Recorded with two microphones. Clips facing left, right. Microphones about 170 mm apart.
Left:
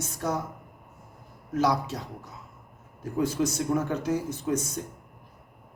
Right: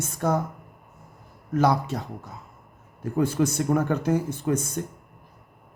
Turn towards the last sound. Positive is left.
turn(degrees=-55)  # may be behind; listen again after turning